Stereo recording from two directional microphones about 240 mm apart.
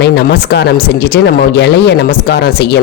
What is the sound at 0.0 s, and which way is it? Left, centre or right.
Speech, left.